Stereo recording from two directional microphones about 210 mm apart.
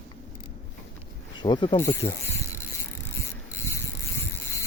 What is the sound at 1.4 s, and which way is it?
Speech, 20° left (ahead or behind).